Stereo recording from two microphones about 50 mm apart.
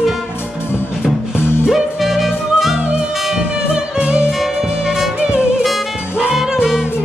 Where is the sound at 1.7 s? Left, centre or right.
Centre; by 4.3 s right.